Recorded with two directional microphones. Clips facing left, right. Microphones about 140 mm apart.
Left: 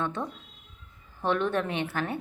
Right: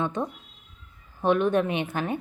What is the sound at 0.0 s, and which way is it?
Speech, 15° right (ahead or behind).